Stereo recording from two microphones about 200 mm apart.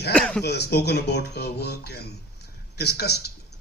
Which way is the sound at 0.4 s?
55° left (ahead or behind).